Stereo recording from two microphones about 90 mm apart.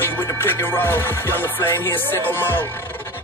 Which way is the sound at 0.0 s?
25° left (ahead or behind).